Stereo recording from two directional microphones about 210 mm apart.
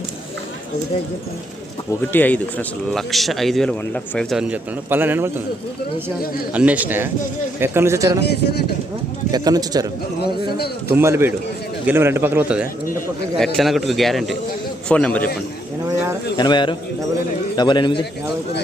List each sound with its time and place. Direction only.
1.9 s speech: 10° left (ahead or behind); by 5.3 s 10° right (ahead or behind)
6.5 s a man's voice: 5° right (ahead or behind)
8.2 s speech: 50° left (ahead or behind)
9.3 s a man's voice: 20° right (ahead or behind)
10.8 s a man's voice: 10° right (ahead or behind); by 15.3 s 5° left (ahead or behind)
16.4 s a man's voice: 20° left (ahead or behind)